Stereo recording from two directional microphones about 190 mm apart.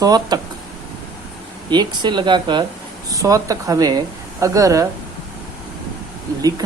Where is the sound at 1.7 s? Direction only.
25° right (ahead or behind).